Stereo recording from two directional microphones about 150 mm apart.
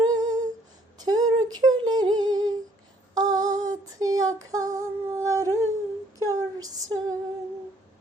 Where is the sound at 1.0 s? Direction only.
25° right (ahead or behind).